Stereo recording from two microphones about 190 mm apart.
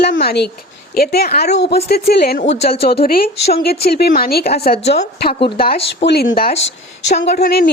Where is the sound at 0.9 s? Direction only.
55° left (ahead or behind).